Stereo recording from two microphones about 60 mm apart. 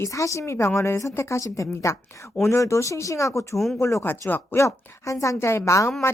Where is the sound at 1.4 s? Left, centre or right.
Left.